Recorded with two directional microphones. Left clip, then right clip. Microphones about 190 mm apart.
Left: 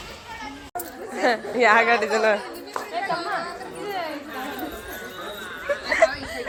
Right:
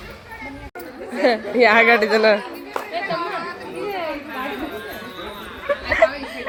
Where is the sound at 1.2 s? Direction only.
30° right (ahead or behind).